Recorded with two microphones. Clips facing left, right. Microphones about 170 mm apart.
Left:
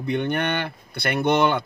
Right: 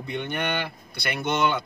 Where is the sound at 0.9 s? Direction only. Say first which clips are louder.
Left 8 dB; 50° left (ahead or behind).